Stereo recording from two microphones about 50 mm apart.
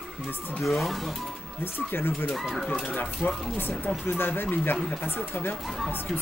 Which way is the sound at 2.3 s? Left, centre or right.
Centre.